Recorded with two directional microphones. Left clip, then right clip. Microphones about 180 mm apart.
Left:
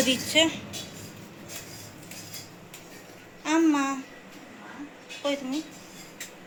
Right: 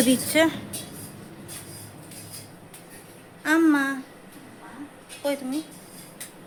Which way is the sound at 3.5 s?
30° right (ahead or behind).